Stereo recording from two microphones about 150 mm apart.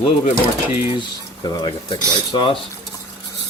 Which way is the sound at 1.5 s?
30° left (ahead or behind).